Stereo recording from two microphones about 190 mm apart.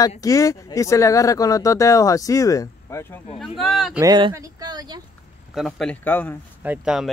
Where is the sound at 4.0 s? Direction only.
20° right (ahead or behind).